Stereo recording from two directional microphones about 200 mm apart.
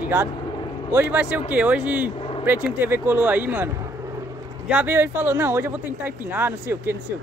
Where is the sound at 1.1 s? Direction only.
5° right (ahead or behind).